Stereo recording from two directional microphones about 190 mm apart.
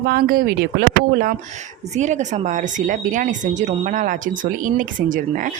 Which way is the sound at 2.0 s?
40° right (ahead or behind).